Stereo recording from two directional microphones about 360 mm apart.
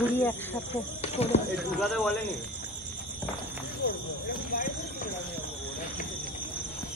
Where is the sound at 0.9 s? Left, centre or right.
Centre.